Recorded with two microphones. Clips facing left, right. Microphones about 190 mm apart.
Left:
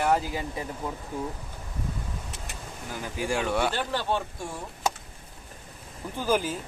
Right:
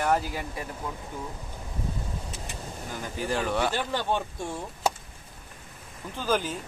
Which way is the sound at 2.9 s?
10° left (ahead or behind).